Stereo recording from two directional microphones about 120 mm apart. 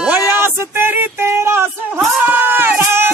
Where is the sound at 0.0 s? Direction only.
15° right (ahead or behind).